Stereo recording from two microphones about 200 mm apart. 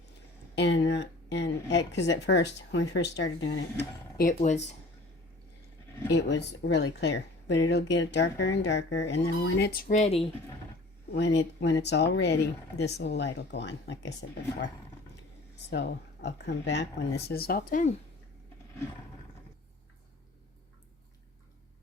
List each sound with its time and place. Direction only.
0.5 s speech: 60° left (ahead or behind)
4.2 s speech: 40° left (ahead or behind)
6.1 s speech: 60° left (ahead or behind); by 10.2 s 30° left (ahead or behind)
11.1 s speech: 55° left (ahead or behind); by 17.9 s 40° left (ahead or behind)